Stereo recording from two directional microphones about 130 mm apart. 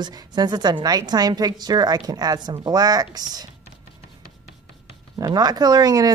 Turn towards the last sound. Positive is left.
turn(degrees=-30)  # may be behind; listen again after turning